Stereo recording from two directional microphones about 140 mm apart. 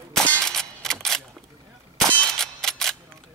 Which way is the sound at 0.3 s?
5° left (ahead or behind).